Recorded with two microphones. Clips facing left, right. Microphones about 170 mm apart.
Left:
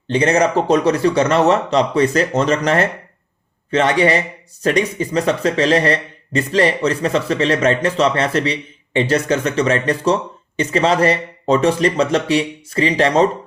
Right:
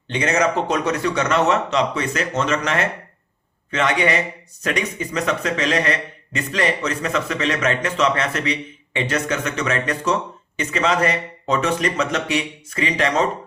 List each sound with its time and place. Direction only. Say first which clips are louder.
0.1 s speech: left 5 dB; 35° left (ahead or behind)